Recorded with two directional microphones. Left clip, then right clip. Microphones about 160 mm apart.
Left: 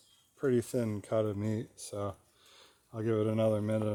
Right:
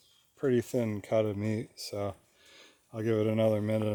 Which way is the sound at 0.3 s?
15° right (ahead or behind).